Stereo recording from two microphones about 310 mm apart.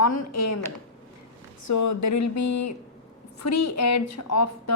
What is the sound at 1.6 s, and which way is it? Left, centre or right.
A woman's voice, left.